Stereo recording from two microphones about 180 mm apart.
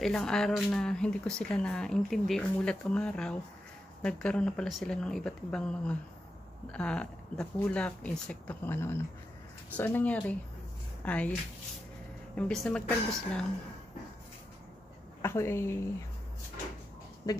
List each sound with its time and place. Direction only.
0.0 s speech: 5° left (ahead or behind)
12.4 s speech: 5° left (ahead or behind)
15.2 s speech: 15° left (ahead or behind)
17.3 s speech: 20° left (ahead or behind)